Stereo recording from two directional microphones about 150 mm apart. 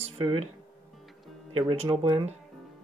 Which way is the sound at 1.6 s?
35° right (ahead or behind).